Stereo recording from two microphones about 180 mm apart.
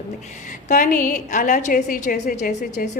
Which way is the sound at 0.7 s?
50° left (ahead or behind).